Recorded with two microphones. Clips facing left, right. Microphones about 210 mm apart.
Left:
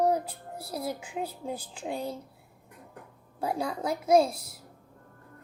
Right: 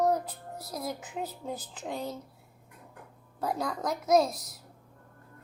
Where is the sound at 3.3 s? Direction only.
10° left (ahead or behind).